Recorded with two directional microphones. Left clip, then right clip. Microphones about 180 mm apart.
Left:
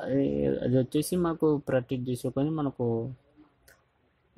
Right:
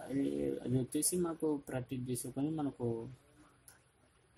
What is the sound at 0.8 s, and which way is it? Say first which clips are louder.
Speech: left 9 dB; 35° left (ahead or behind).